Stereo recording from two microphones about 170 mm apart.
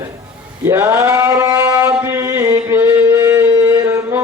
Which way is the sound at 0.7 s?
10° right (ahead or behind).